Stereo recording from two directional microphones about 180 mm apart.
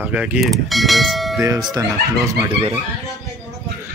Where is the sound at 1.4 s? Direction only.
20° right (ahead or behind).